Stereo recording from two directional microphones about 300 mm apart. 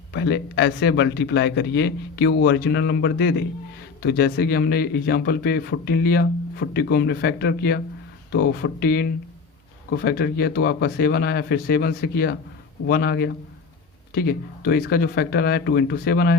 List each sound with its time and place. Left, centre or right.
0.1 s a man's voice: left